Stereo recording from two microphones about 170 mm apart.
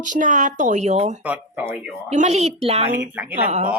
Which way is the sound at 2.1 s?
45° right (ahead or behind).